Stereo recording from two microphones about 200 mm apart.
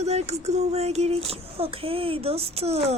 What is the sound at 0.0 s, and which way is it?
Speech, 35° right (ahead or behind).